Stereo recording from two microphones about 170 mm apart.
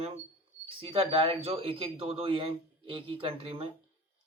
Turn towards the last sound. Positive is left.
turn(degrees=-35)  # may be behind; listen again after turning